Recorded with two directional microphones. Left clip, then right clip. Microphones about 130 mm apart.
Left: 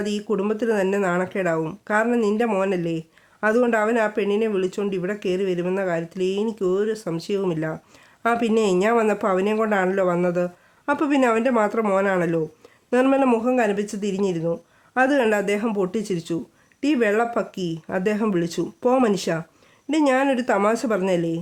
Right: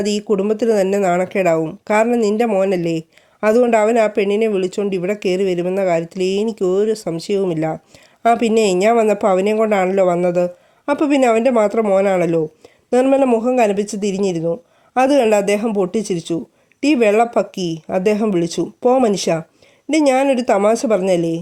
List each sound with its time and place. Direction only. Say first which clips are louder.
0.0 s a woman's voice: right 7 dB; 35° right (ahead or behind)